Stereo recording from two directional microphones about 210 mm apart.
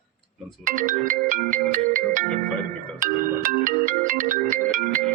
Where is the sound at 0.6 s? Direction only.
40° right (ahead or behind).